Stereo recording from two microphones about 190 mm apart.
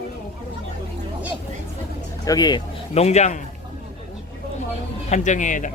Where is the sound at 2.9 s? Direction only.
35° left (ahead or behind).